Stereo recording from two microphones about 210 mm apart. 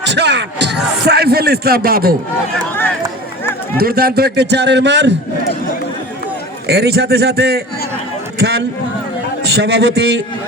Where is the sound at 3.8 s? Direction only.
45° right (ahead or behind).